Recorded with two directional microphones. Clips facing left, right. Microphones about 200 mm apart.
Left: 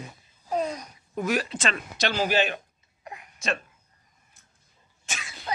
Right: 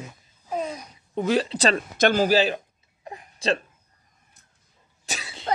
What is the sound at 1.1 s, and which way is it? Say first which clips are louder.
Speech: right 4 dB; 25° right (ahead or behind).